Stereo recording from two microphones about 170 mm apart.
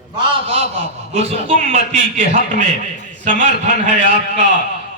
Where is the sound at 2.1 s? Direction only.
50° right (ahead or behind).